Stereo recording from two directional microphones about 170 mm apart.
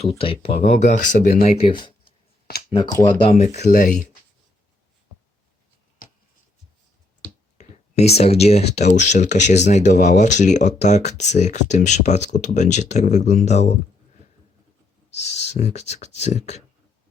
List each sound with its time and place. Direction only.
0.2 s speech: 35° left (ahead or behind)
3.3 s speech: 40° left (ahead or behind)
7.6 s speech: 40° left (ahead or behind)
15.1 s speech: 40° left (ahead or behind)